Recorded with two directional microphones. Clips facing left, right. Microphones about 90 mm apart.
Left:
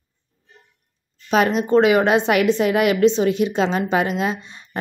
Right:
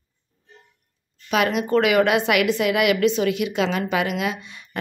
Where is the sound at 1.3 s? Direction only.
35° left (ahead or behind).